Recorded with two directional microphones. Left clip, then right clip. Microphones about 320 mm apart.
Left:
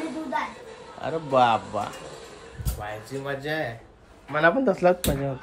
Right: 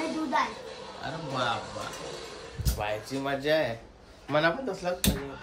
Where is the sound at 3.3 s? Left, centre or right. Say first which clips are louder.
Right 3 dB; centre.